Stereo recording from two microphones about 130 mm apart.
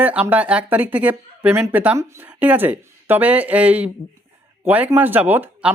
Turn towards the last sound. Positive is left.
turn(degrees=-10)  # may be behind; listen again after turning